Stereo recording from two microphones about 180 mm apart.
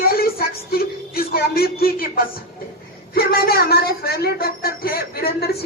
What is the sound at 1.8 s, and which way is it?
Speech, 55° left (ahead or behind).